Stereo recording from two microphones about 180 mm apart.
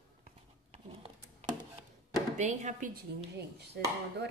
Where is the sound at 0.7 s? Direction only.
35° right (ahead or behind).